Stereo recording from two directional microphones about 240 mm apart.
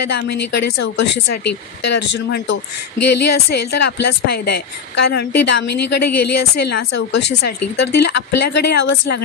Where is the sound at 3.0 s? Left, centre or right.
Left.